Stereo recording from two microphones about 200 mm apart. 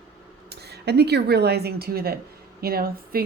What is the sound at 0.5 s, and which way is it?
Speech, 55° right (ahead or behind).